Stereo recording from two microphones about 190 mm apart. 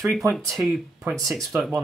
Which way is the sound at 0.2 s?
15° right (ahead or behind).